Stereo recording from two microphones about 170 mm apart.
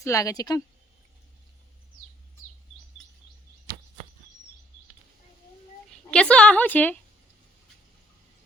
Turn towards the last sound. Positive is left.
turn(degrees=10)  # may be behind; listen again after turning